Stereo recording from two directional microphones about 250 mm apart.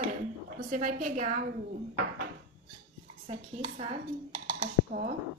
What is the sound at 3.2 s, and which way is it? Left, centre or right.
Speech, right.